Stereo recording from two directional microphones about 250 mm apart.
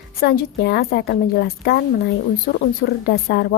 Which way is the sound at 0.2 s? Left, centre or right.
Left.